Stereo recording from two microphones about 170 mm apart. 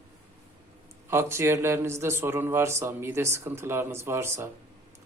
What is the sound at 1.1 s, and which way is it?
A man's voice, 15° right (ahead or behind).